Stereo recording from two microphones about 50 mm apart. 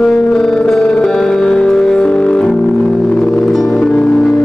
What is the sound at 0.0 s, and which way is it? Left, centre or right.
Music, centre.